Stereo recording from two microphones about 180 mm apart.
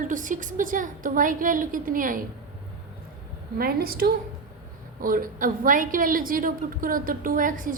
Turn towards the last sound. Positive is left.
turn(degrees=-50)  # may be behind; listen again after turning